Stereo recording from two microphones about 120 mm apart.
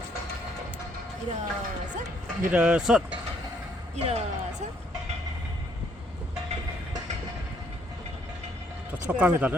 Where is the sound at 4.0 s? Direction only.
60° right (ahead or behind).